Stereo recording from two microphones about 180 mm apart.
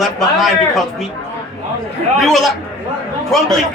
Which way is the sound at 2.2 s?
Centre (ahead or behind).